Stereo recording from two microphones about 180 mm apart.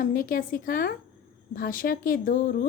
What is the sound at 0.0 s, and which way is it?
Speech, 50° left (ahead or behind).